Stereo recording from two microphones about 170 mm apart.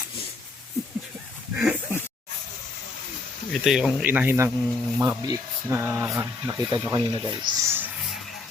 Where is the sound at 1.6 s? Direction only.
5° right (ahead or behind).